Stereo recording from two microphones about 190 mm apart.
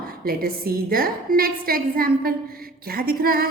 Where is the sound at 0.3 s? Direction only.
50° right (ahead or behind).